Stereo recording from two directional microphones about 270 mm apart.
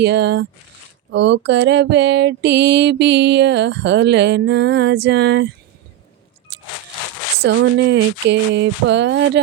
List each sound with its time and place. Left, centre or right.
0.0 s mantra: right
7.4 s mantra: right